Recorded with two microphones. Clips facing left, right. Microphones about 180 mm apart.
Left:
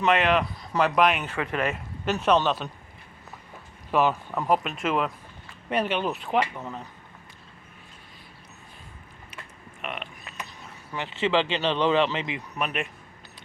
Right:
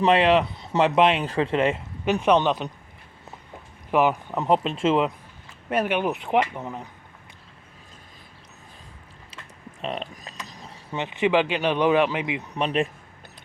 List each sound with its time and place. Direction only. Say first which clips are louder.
0.0 s speech: right 4 dB; 30° right (ahead or behind)
2.0 s speech: right 3 dB; 15° right (ahead or behind)
3.9 s speech: right 2 dB; 15° right (ahead or behind)
5.6 s speech: right 3 dB; 10° right (ahead or behind)
9.8 s speech: right 5 dB; 35° right (ahead or behind)
10.5 s a sound: right 2 dB; 35° right (ahead or behind)
10.9 s speech: right 3 dB; 20° right (ahead or behind)
12.5 s speech: right 6 dB; 30° right (ahead or behind)